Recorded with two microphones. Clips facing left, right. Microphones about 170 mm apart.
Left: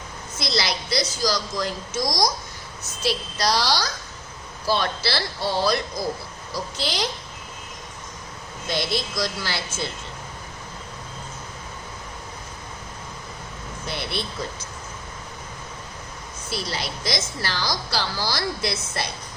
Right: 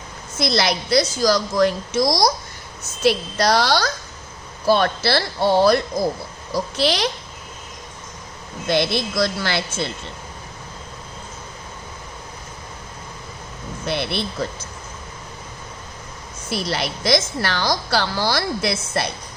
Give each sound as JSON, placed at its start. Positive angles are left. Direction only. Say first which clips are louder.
{"t": 0.3, "sound": "a woman's voice", "louder": "right 6 dB", "side_deg": -55}
{"t": 8.6, "sound": "a woman's voice", "louder": "right 6 dB", "side_deg": -65}
{"t": 13.8, "sound": "a woman's voice", "louder": "right 7 dB", "side_deg": -65}
{"t": 16.5, "sound": "a woman's voice", "louder": "right 6 dB", "side_deg": -65}